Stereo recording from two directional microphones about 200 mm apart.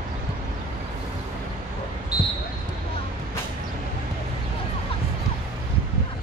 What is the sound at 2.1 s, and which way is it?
Basketball bounce, 5° right (ahead or behind).